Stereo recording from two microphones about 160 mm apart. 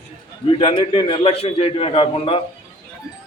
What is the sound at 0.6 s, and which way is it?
A man's voice, 35° left (ahead or behind).